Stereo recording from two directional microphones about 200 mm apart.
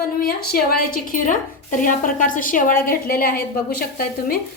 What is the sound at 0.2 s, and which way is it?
A woman's voice, 50° left (ahead or behind).